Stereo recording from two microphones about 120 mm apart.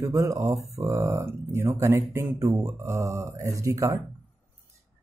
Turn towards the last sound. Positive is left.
turn(degrees=-25)  # may be behind; listen again after turning